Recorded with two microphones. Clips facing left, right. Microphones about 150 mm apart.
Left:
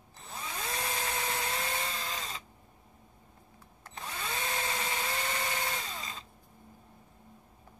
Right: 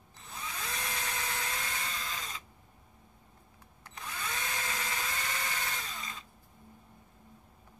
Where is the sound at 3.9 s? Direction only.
30° left (ahead or behind).